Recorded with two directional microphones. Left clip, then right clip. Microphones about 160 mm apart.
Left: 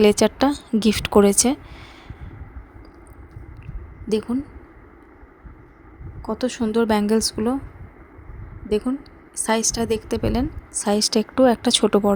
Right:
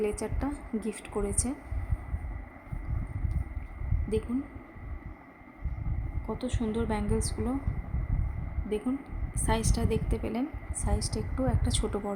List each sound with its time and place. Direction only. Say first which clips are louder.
0.0 s a woman's voice: left 16 dB; 70° left (ahead or behind)
6.2 s a woman's voice: left 10 dB; 55° left (ahead or behind)
9.3 s a woman's voice: left 10 dB; 50° left (ahead or behind)